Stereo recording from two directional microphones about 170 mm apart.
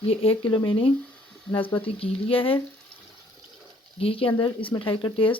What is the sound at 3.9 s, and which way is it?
Speech, 35° left (ahead or behind).